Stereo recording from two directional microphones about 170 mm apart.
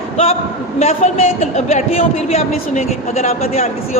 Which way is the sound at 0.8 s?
40° left (ahead or behind).